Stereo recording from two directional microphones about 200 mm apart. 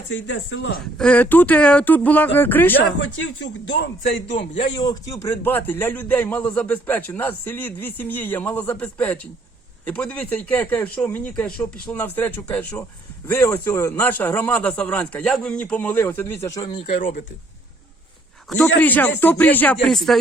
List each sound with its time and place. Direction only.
0.1 s speech: 70° left (ahead or behind)
0.9 s a man's voice: 5° left (ahead or behind)
3.7 s a man's voice: 60° left (ahead or behind)
4.5 s a man's voice: 20° left (ahead or behind)
16.6 s speech: 30° left (ahead or behind)
18.4 s a man's voice: 5° left (ahead or behind)